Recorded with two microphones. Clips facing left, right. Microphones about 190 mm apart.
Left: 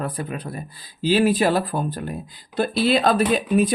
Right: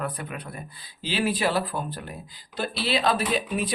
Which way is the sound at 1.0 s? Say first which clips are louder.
Left 8 dB; 45° left (ahead or behind).